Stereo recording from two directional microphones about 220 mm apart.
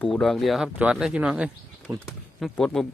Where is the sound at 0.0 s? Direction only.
Centre (ahead or behind).